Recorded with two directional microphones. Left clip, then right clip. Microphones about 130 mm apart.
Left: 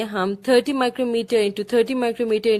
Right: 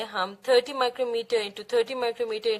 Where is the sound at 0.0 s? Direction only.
45° left (ahead or behind).